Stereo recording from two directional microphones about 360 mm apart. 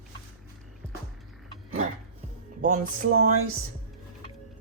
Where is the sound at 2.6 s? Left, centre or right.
Right.